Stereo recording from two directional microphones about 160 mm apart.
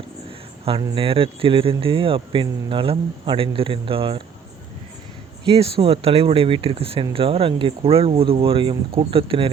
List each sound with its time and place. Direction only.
0.3 s a sound: 35° right (ahead or behind)
0.9 s speech: 35° right (ahead or behind)
5.5 s speech: 40° right (ahead or behind)